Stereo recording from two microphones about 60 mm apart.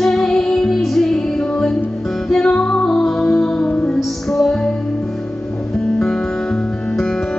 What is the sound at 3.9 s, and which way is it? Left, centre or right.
Music, centre.